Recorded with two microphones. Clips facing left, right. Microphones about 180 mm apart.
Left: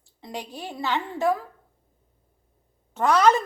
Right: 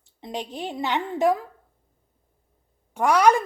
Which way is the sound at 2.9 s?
10° right (ahead or behind).